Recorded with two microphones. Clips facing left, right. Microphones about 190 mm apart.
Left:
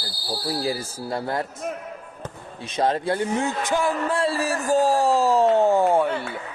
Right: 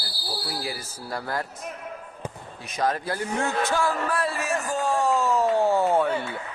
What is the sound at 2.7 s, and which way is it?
A man's voice, 25° left (ahead or behind).